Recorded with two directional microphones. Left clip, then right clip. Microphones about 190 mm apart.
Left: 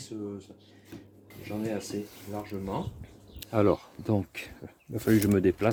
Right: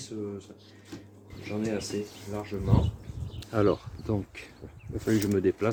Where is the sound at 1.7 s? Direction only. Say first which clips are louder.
Right 2 dB; 15° left (ahead or behind).